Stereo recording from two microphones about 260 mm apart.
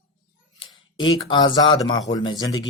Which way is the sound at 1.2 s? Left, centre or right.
Centre.